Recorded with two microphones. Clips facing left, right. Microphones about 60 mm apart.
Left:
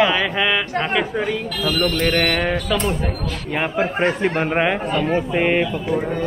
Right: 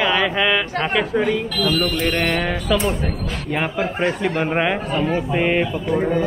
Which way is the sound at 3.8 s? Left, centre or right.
Left.